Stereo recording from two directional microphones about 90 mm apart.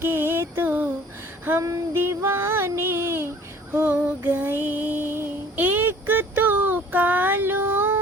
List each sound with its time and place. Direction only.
0.0 s music: 25° right (ahead or behind)
1.6 s female singing: 30° right (ahead or behind)